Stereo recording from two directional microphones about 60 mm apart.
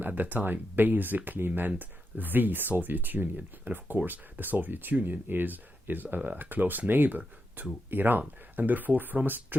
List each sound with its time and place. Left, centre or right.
0.0 s speech: right